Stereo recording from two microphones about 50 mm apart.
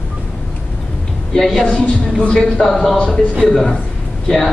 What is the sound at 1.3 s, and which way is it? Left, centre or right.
A man's voice, centre.